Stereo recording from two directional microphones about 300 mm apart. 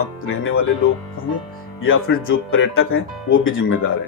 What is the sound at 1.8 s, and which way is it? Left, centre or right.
Speech, left.